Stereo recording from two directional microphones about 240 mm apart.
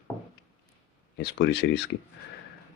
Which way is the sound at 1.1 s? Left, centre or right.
Left.